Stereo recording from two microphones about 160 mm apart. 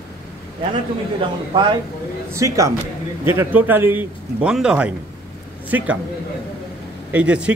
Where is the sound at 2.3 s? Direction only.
20° right (ahead or behind).